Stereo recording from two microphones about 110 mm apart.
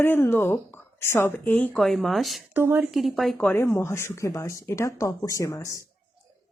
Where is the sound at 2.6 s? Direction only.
20° right (ahead or behind).